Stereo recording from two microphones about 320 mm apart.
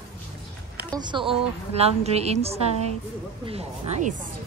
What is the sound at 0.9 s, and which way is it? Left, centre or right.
A woman's voice, centre.